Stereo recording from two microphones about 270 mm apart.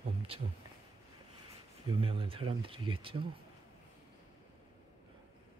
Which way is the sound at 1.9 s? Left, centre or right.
Centre.